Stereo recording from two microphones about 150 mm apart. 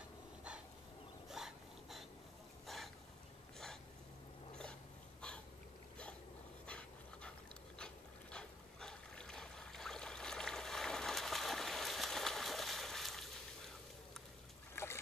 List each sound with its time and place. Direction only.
1.3 s a sound: centre (ahead or behind)
6.6 s dog: 5° left (ahead or behind)
14.8 s boat: 15° left (ahead or behind)